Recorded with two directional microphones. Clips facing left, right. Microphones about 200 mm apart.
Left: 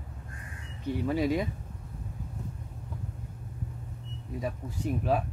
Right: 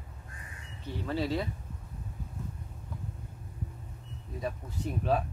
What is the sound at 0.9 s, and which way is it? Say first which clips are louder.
Speech: left 5 dB; 15° left (ahead or behind).